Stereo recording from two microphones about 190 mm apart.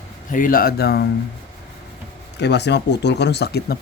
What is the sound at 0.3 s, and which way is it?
Speech, 45° left (ahead or behind).